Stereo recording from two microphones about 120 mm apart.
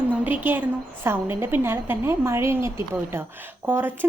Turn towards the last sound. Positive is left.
turn(degrees=-15)  # may be behind; listen again after turning